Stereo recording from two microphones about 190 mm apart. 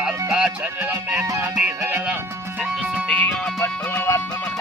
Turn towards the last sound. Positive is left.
turn(degrees=15)  # may be behind; listen again after turning